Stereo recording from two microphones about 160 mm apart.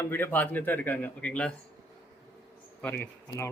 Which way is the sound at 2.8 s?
10° left (ahead or behind).